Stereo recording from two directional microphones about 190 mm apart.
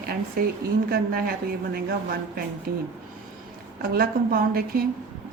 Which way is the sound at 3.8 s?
50° right (ahead or behind).